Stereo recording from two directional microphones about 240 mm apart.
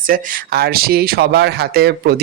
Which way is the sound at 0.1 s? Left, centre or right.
Right.